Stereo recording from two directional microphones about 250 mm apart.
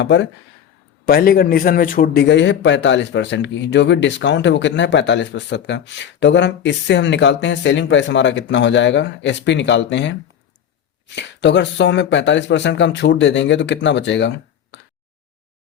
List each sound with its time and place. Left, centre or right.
0.0 s a man's voice: left